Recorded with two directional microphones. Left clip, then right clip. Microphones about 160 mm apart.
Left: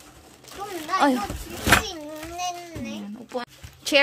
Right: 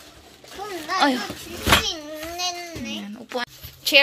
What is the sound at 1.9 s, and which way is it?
Child singing, 70° left (ahead or behind).